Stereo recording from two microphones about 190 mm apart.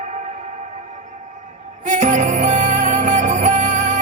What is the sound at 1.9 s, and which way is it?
Music, 40° right (ahead or behind).